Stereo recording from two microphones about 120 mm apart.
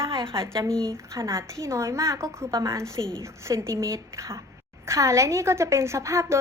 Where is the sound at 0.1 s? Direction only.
45° right (ahead or behind).